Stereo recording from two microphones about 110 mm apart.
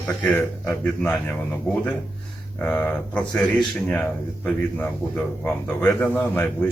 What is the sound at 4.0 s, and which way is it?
Speech, 15° left (ahead or behind).